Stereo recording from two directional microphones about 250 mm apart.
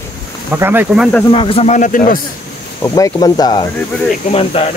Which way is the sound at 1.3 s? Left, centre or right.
Left.